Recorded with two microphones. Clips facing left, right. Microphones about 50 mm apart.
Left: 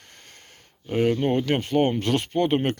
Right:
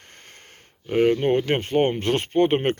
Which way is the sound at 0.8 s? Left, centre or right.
Right.